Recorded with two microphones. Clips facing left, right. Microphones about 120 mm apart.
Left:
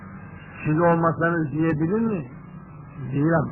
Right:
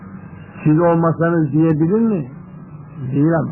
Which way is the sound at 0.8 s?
25° right (ahead or behind).